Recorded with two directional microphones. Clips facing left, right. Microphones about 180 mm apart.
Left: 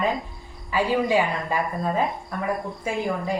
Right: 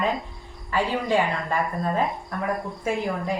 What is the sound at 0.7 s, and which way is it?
A woman's voice, 10° left (ahead or behind).